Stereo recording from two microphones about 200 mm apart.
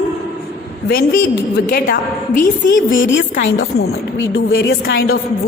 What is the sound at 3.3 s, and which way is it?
Speech, 50° left (ahead or behind).